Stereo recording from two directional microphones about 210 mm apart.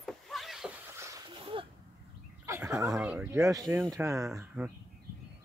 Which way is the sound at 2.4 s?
15° right (ahead or behind).